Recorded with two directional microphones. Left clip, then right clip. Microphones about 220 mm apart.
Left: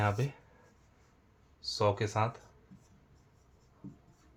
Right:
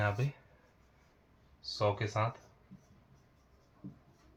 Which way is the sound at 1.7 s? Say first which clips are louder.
Left 2 dB; 55° left (ahead or behind).